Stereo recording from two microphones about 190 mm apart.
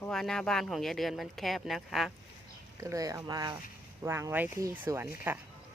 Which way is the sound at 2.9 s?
20° right (ahead or behind).